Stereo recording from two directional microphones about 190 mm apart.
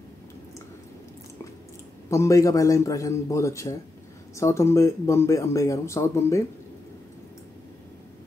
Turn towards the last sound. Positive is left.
turn(degrees=15)  # may be behind; listen again after turning